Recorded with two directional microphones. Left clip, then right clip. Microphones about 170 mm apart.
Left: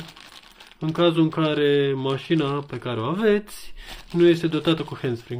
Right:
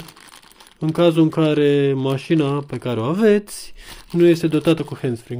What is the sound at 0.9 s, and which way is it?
Speech, 45° right (ahead or behind).